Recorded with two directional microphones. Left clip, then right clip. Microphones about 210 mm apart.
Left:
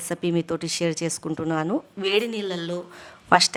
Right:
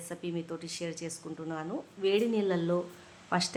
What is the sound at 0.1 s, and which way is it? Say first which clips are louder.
Speech: left 12 dB; 50° left (ahead or behind).